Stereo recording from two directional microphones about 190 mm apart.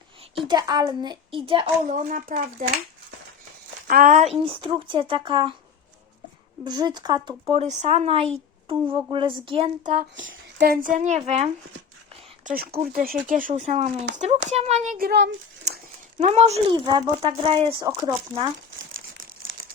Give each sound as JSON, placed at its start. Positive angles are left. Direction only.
{"t": 0.3, "sound": "speech", "side_deg": -20}
{"t": 1.9, "sound": "speech", "side_deg": -40}
{"t": 3.8, "sound": "speech", "side_deg": -50}
{"t": 4.4, "sound": "speech", "side_deg": -25}
{"t": 6.7, "sound": "speech", "side_deg": -20}
{"t": 7.4, "sound": "speech", "side_deg": -35}
{"t": 10.2, "sound": "speech", "side_deg": -75}
{"t": 10.7, "sound": "speech", "side_deg": -45}
{"t": 12.5, "sound": "speech", "side_deg": -50}
{"t": 13.5, "sound": "speech", "side_deg": -35}
{"t": 14.9, "sound": "a child's voice", "side_deg": -55}
{"t": 16.1, "sound": "speech", "side_deg": -35}